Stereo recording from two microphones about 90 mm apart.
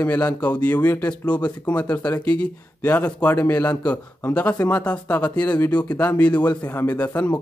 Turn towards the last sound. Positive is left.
turn(degrees=15)  # may be behind; listen again after turning